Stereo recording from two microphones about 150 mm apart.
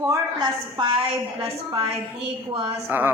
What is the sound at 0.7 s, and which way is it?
Speech, 35° right (ahead or behind).